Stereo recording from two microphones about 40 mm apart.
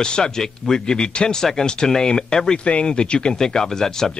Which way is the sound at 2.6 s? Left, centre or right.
Left.